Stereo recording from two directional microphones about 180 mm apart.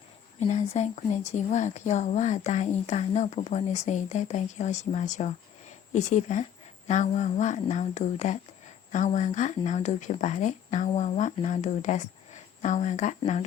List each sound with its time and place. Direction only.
0.3 s speech: 40° left (ahead or behind)